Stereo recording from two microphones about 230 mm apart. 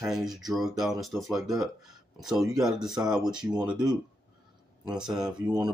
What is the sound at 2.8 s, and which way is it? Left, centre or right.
Speech, centre.